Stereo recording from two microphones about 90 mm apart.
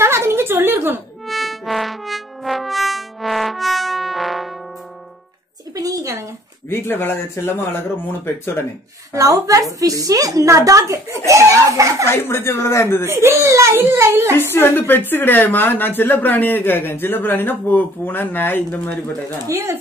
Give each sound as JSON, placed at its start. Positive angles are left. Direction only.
{"t": 0.0, "sound": "a sound", "side_deg": -30}
{"t": 1.2, "sound": "music", "side_deg": 0}
{"t": 5.8, "sound": "a sound", "side_deg": -40}
{"t": 6.7, "sound": "a man's voice", "side_deg": 25}
{"t": 9.1, "sound": "a woman's voice", "side_deg": -35}
{"t": 12.1, "sound": "a man's voice", "side_deg": 25}
{"t": 13.0, "sound": "a child's voice", "side_deg": -25}
{"t": 14.5, "sound": "a man's voice", "side_deg": 25}
{"t": 19.4, "sound": "a woman's voice", "side_deg": -35}